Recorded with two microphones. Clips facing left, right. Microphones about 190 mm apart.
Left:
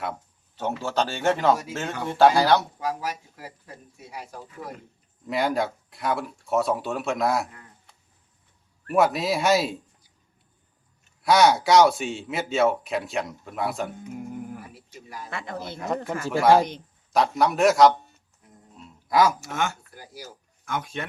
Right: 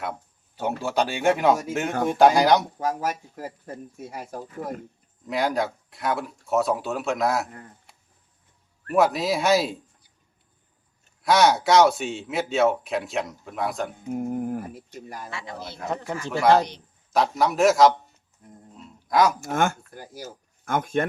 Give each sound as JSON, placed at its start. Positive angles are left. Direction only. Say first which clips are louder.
{"t": 0.0, "sound": "a sound", "louder": "even", "side_deg": -10}
{"t": 0.8, "sound": "speech", "louder": "right 2 dB", "side_deg": -10}
{"t": 2.7, "sound": "speech", "louder": "right 3 dB", "side_deg": -45}
{"t": 5.3, "sound": "speech", "louder": "even", "side_deg": 0}
{"t": 8.9, "sound": "speech", "louder": "right 1 dB", "side_deg": 0}
{"t": 11.2, "sound": "speech", "louder": "left 1 dB", "side_deg": 0}
{"t": 14.1, "sound": "speech", "louder": "right 8 dB", "side_deg": -45}
{"t": 15.3, "sound": "speech", "louder": "left 3 dB", "side_deg": 55}
{"t": 16.4, "sound": "speech", "louder": "left 1 dB", "side_deg": 10}
{"t": 17.1, "sound": "speech", "louder": "even", "side_deg": 0}
{"t": 19.0, "sound": "speech", "louder": "even", "side_deg": 0}
{"t": 19.4, "sound": "speech", "louder": "right 5 dB", "side_deg": -50}